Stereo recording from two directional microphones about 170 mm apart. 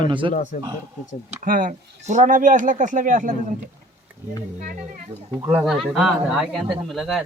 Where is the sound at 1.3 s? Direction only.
50° right (ahead or behind).